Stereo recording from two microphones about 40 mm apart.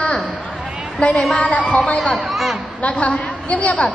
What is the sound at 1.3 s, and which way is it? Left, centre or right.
A woman's voice, left.